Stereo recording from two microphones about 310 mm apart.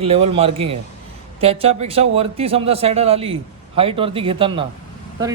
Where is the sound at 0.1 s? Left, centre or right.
Centre.